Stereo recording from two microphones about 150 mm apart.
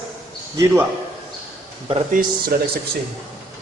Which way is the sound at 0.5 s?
20° right (ahead or behind).